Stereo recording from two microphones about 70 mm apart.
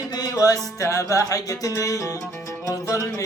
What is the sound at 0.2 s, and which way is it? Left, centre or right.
Music, left.